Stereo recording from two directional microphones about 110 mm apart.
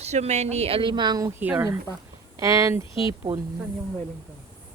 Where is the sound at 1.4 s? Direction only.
15° right (ahead or behind).